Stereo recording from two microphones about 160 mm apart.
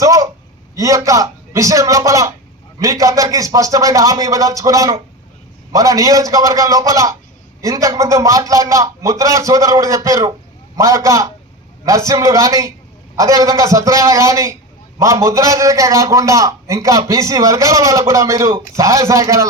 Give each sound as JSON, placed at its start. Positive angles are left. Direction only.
{"t": 0.0, "sound": "a woman's voice", "side_deg": -20}